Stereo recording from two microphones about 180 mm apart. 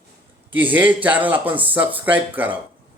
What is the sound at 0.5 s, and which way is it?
Speech, 10° right (ahead or behind).